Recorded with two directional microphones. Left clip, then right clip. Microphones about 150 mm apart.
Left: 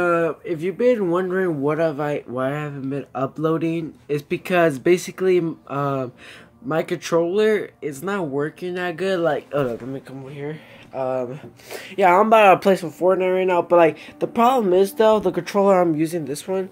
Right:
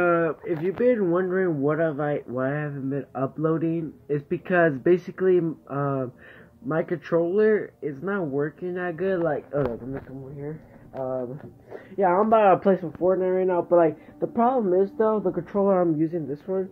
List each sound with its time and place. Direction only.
0.0 s speech: 15° left (ahead or behind)
11.0 s speech: 35° left (ahead or behind); by 12.8 s 20° left (ahead or behind)
12.8 s speech: 35° left (ahead or behind)
14.6 s speech: 50° left (ahead or behind)
15.0 s speech: 35° left (ahead or behind)